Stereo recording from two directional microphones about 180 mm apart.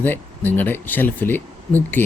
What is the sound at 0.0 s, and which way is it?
Speech, 10° left (ahead or behind).